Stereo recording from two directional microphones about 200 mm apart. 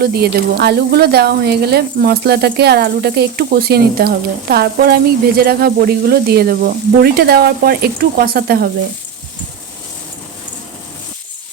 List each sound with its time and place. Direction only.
0.0 s speech: 50° right (ahead or behind)